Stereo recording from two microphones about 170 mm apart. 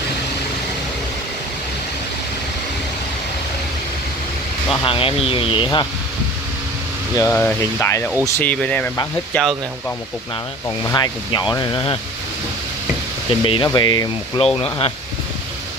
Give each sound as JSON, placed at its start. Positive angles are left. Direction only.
{"t": 4.8, "sound": "speech", "side_deg": 30}
{"t": 7.2, "sound": "speech", "side_deg": 10}
{"t": 10.9, "sound": "speech", "side_deg": 25}
{"t": 13.4, "sound": "speech", "side_deg": 30}